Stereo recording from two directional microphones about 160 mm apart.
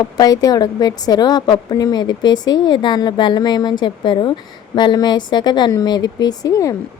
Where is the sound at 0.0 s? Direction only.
25° left (ahead or behind).